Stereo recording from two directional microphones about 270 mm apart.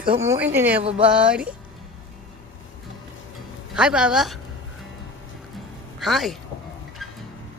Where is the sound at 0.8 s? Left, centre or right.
Right.